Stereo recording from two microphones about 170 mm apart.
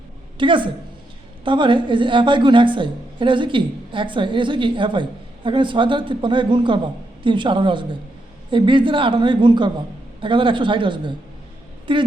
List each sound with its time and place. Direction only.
0.3 s a woman's voice: 30° right (ahead or behind)